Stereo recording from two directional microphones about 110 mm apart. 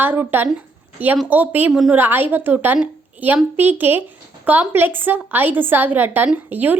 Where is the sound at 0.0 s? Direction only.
20° right (ahead or behind).